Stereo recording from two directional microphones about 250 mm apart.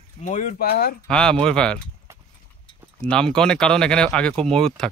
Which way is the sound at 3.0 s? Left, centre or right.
Centre.